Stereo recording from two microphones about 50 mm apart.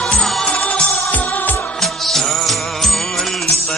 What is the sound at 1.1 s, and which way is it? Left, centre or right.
Music, left.